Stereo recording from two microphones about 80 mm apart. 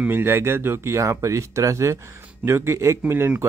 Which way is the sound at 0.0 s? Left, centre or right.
Right.